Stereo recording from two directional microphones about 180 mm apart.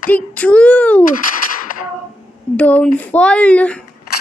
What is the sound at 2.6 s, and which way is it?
Speech, 10° left (ahead or behind).